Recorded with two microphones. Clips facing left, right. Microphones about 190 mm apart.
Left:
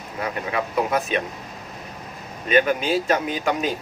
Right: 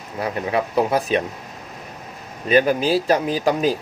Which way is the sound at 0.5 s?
35° right (ahead or behind).